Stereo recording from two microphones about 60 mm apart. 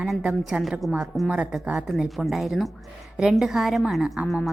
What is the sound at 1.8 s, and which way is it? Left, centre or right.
A woman's voice, centre.